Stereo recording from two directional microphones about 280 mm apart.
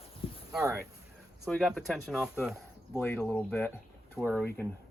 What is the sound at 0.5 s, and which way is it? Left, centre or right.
Speech, centre.